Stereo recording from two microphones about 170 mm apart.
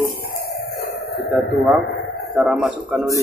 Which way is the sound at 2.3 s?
Centre (ahead or behind).